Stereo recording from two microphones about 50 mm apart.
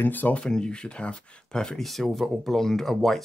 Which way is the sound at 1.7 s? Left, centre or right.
Centre.